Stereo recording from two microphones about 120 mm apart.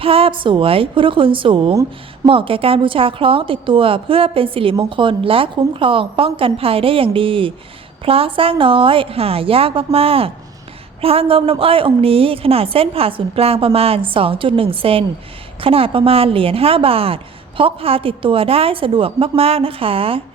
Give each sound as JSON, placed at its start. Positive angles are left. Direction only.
{"t": 0.0, "sound": "a woman's voice", "side_deg": -50}